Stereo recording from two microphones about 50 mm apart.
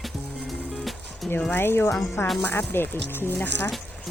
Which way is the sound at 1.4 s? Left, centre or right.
Left.